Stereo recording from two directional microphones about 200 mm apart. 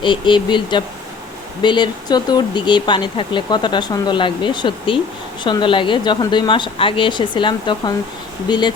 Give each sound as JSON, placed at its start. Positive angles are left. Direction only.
{"t": 0.0, "sound": "speech", "side_deg": 25}